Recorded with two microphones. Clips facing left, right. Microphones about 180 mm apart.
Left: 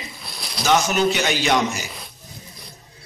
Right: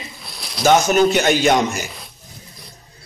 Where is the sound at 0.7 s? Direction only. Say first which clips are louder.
Right 5 dB; 50° right (ahead or behind).